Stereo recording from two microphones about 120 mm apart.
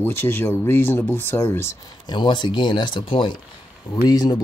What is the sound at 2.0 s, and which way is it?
Speech, 40° left (ahead or behind).